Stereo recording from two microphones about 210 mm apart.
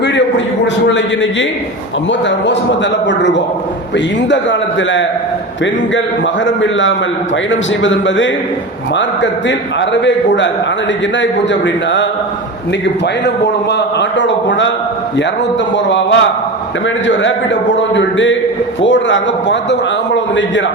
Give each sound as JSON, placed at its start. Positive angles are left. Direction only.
{"t": 0.0, "sound": "a sound", "side_deg": 55}
{"t": 0.9, "sound": "a man's voice", "side_deg": 60}
{"t": 15.7, "sound": "a man's voice", "side_deg": 60}